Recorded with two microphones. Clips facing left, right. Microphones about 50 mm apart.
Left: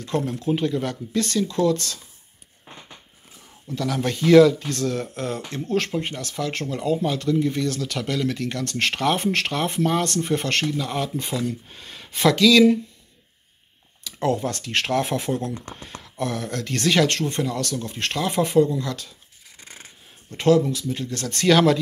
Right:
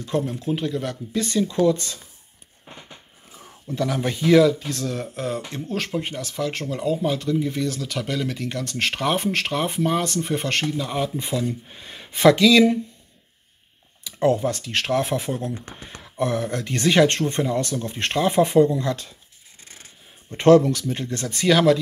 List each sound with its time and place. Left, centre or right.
0.0 s speech: centre
1.2 s speech: centre
3.7 s speech: centre
14.0 s speech: centre
15.8 s speech: right
19.6 s a sound: left
20.4 s speech: right
20.9 s speech: right
21.3 s speech: centre